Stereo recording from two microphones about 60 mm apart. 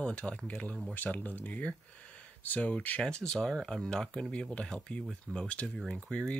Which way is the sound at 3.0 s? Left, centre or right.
Centre.